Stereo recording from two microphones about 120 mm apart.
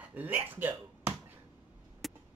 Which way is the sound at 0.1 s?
15° right (ahead or behind).